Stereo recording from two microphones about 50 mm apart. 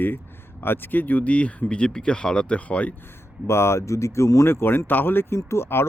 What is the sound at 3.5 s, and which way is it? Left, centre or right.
Speech, left.